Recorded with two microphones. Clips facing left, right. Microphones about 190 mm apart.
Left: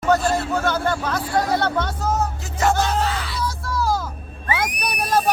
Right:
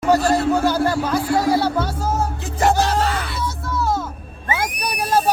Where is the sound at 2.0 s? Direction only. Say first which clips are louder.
Right 1 dB; 30° right (ahead or behind).